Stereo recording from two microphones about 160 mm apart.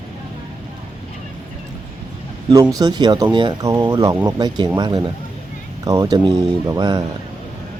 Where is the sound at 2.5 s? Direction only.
25° right (ahead or behind).